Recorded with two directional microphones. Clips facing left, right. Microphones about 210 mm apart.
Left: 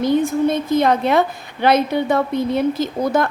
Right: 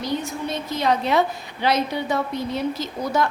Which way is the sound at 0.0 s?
50° left (ahead or behind).